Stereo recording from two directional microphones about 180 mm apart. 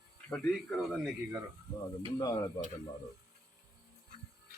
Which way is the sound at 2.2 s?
20° left (ahead or behind).